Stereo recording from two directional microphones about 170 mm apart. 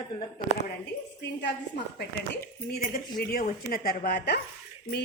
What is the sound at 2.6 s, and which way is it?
A woman's voice, 65° left (ahead or behind).